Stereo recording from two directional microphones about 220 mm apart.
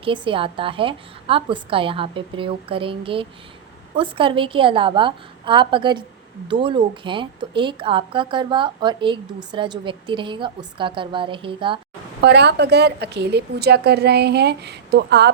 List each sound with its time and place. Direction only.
0.0 s a woman's voice: 25° right (ahead or behind)
12.2 s a woman's voice: 50° right (ahead or behind)